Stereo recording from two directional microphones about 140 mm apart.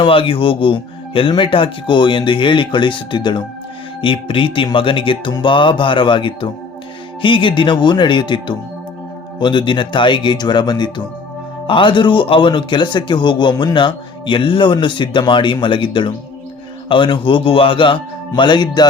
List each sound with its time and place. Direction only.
0.0 s speech: 40° left (ahead or behind)